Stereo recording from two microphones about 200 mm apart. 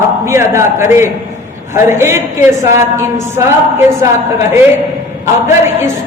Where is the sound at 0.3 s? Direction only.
15° right (ahead or behind).